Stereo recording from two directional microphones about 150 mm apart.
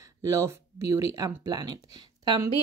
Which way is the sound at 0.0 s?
20° right (ahead or behind).